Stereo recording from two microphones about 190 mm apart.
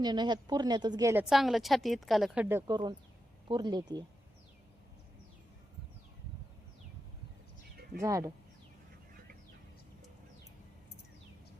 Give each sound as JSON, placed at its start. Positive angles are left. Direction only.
{"t": 0.0, "sound": "a woman's voice", "side_deg": -20}
{"t": 1.3, "sound": "a woman's voice", "side_deg": 0}
{"t": 8.0, "sound": "speech", "side_deg": -15}